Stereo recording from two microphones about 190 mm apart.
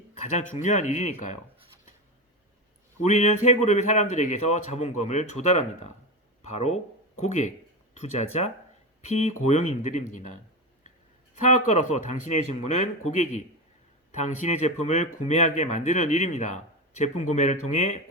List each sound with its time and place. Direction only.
0.3 s speech: 40° left (ahead or behind)
3.0 s speech: 40° left (ahead or behind)
11.3 s speech: 40° left (ahead or behind)